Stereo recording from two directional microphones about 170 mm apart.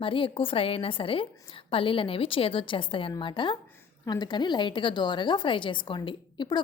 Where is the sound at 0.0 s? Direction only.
30° left (ahead or behind).